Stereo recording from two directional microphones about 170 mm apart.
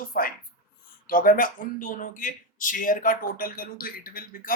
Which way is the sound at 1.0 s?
55° left (ahead or behind).